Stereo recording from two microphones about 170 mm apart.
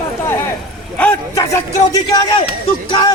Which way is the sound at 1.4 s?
20° left (ahead or behind).